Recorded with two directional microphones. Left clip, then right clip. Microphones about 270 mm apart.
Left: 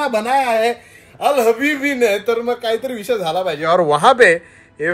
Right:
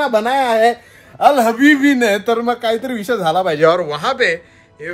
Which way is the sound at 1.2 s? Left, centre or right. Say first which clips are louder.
Right 4 dB; right.